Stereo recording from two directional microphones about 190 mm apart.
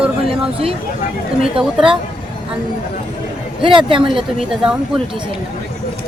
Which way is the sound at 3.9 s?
25° right (ahead or behind).